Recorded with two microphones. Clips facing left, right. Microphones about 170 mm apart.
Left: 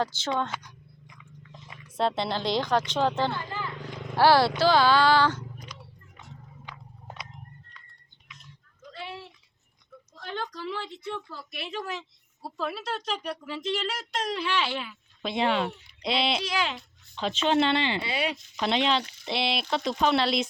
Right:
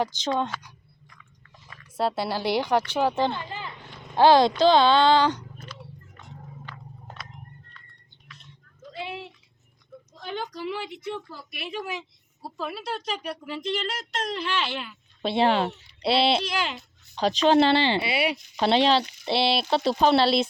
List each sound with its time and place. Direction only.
0.0 s speech: 15° right (ahead or behind)
1.1 s chewing: 15° left (ahead or behind)
2.0 s speech: 5° right (ahead or behind)
6.7 s a sound: 10° left (ahead or behind)
8.9 s a sound: 15° right (ahead or behind)
10.4 s a woman's voice: 10° right (ahead or behind)
13.7 s speech: 5° left (ahead or behind)
15.2 s speech: 30° right (ahead or behind)
16.4 s speech: centre (ahead or behind)
17.2 s speech: 40° right (ahead or behind)
18.0 s speech: 10° right (ahead or behind)
18.5 s speech: 35° right (ahead or behind)